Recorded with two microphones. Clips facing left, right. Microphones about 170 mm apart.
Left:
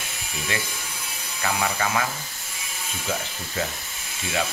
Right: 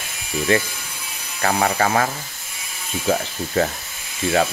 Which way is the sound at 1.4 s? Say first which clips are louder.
Right 6 dB; 40° right (ahead or behind).